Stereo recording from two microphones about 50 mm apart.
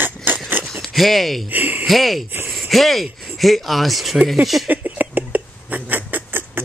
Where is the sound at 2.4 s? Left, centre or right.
Centre.